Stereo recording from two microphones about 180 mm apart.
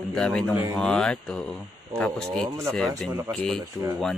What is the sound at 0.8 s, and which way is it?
Speech, 5° left (ahead or behind).